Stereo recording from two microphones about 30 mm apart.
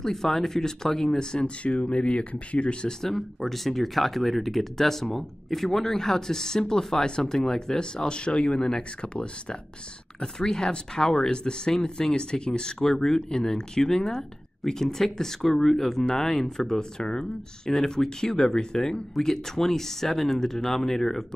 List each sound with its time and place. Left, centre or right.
0.0 s speech: centre
1.6 s speech: left
3.0 s speech: centre
3.3 s speech: centre